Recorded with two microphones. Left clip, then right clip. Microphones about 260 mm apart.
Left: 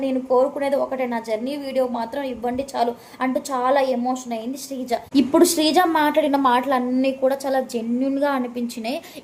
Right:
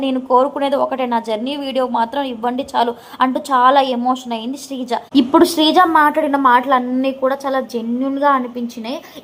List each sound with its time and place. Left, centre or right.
0.0 s a woman's voice: centre